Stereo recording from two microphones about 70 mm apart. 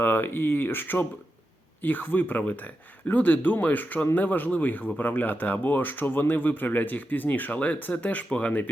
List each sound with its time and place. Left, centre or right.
0.0 s speech: left